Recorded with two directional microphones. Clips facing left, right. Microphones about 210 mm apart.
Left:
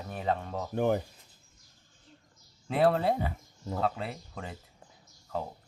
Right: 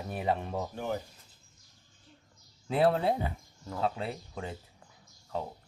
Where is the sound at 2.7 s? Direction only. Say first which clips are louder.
Left 1 dB; centre (ahead or behind).